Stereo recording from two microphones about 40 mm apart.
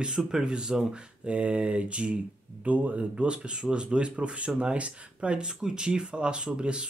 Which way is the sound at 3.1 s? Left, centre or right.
Right.